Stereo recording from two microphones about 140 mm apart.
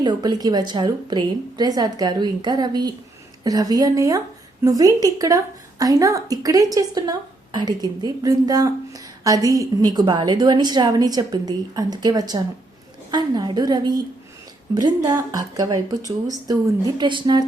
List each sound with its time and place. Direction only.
0.0 s a woman's voice: 30° right (ahead or behind)